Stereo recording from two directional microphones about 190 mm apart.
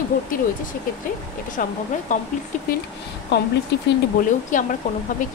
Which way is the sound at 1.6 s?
45° left (ahead or behind).